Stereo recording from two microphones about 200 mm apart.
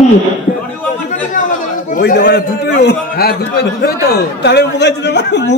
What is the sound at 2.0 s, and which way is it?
A man's voice, 55° left (ahead or behind).